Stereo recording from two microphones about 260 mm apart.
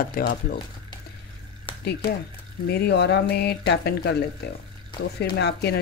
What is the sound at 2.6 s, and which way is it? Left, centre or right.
Speech, left.